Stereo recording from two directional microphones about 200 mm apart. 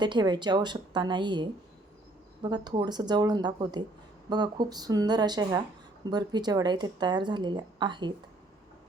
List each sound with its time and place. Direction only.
0.0 s speech: 20° right (ahead or behind)